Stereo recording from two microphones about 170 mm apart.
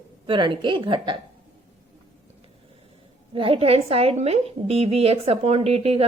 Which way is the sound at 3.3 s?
30° right (ahead or behind).